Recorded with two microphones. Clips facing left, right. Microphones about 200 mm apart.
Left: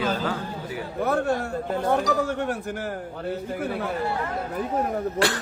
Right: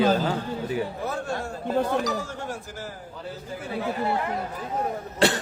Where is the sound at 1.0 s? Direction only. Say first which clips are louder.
Left 6 dB; 60° left (ahead or behind).